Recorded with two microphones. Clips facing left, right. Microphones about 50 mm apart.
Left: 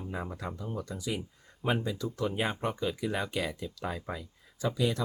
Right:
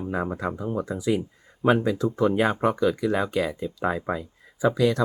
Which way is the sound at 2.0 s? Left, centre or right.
Right.